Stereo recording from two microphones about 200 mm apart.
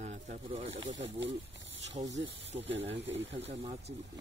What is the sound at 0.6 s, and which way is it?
Speech, 65° right (ahead or behind).